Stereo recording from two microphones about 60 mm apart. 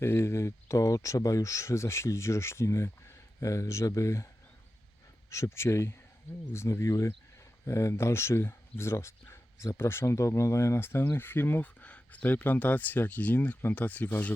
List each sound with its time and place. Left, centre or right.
0.0 s speech: left
5.3 s speech: left
6.8 s speech: left
11.6 s speech: left